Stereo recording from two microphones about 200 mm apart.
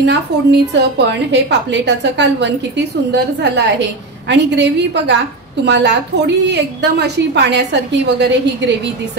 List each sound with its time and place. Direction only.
0.0 s a woman's voice: 60° right (ahead or behind)